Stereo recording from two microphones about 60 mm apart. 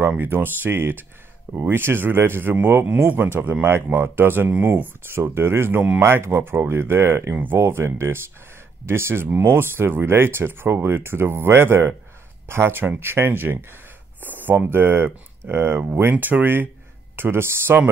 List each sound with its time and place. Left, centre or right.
0.2 s speech: right